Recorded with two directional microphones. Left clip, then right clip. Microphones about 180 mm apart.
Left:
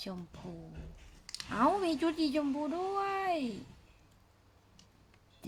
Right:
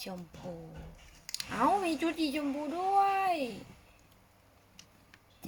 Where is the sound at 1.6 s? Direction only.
30° left (ahead or behind).